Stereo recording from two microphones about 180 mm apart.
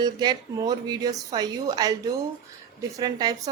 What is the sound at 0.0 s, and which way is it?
A woman's voice, 25° right (ahead or behind).